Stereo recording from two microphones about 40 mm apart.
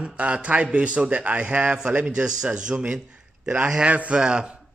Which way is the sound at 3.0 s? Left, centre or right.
Right.